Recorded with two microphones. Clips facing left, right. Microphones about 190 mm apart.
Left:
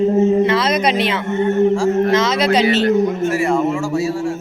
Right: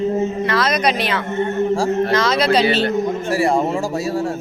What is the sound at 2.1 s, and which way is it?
Speech, 20° left (ahead or behind).